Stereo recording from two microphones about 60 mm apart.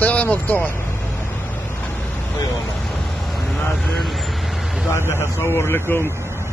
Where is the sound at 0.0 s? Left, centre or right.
Left.